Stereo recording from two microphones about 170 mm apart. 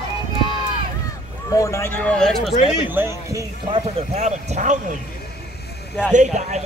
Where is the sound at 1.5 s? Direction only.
20° left (ahead or behind).